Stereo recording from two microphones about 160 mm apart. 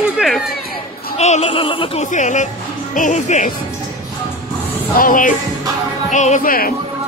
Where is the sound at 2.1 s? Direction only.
50° left (ahead or behind).